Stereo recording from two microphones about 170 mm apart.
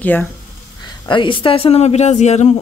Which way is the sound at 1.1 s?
30° left (ahead or behind).